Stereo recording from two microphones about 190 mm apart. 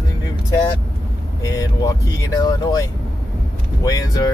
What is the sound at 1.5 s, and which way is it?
Speech, 20° left (ahead or behind).